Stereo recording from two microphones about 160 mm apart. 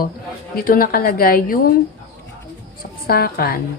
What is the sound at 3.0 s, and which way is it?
Speech, 70° left (ahead or behind).